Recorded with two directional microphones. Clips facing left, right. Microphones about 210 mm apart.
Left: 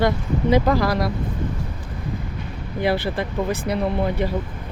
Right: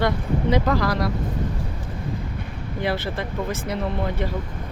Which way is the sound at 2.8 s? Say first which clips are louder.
Left 4 dB; 15° left (ahead or behind).